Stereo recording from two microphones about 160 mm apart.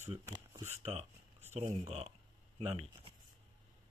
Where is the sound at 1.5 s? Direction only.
45° right (ahead or behind).